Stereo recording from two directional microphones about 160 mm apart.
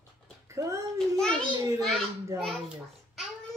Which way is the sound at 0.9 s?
5° left (ahead or behind).